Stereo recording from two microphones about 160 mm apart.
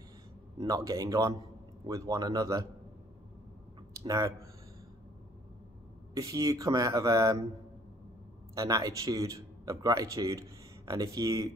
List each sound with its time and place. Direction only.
0.6 s speech: 20° right (ahead or behind)
6.1 s speech: 20° right (ahead or behind)
8.5 s speech: 25° right (ahead or behind)